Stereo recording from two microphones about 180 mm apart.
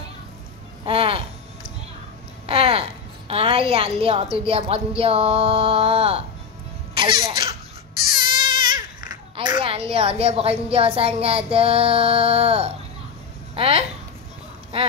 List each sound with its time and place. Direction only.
0.8 s a sound: 30° right (ahead or behind)
4.5 s speech: 30° right (ahead or behind)
7.0 s laughter: 25° right (ahead or behind)
8.1 s a child's voice: 25° right (ahead or behind)